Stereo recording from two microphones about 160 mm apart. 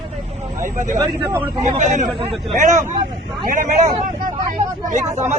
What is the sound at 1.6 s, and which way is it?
Speech, 50° right (ahead or behind).